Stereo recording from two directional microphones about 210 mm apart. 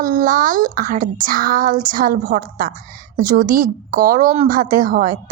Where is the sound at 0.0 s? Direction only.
40° right (ahead or behind).